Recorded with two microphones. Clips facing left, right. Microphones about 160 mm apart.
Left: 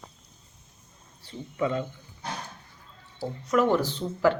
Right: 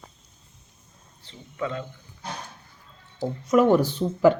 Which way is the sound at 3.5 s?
15° right (ahead or behind).